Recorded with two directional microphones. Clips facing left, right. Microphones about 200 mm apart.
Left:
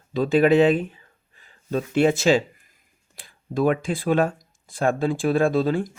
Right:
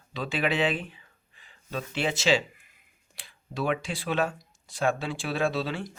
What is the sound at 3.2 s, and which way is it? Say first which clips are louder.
Speech: left 9 dB; 45° left (ahead or behind).